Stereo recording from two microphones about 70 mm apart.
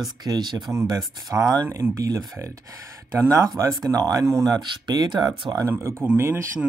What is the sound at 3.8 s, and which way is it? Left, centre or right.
Speech, right.